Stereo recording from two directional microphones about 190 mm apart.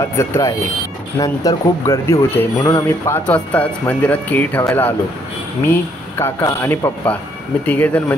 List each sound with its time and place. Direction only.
0.0 s speech: 15° left (ahead or behind)